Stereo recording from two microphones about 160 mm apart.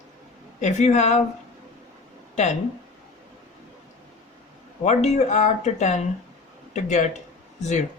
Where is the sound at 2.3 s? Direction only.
45° left (ahead or behind).